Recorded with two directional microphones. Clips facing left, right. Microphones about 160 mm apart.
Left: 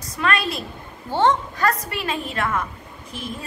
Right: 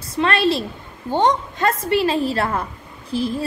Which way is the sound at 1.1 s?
15° right (ahead or behind).